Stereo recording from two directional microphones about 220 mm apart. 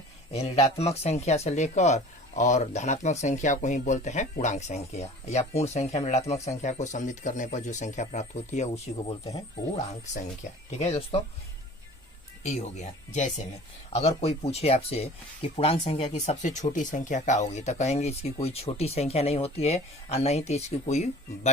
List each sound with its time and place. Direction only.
0.3 s speech: 30° left (ahead or behind)
12.4 s speech: 30° left (ahead or behind)